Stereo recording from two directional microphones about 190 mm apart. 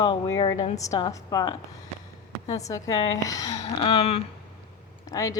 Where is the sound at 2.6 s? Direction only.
20° left (ahead or behind).